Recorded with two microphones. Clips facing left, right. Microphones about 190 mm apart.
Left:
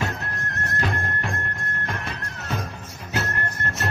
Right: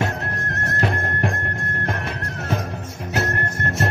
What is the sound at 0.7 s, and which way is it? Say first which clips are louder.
Music: right 4 dB; 45° right (ahead or behind).